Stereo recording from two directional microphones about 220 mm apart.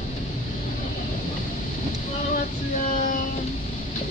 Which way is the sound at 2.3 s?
35° left (ahead or behind).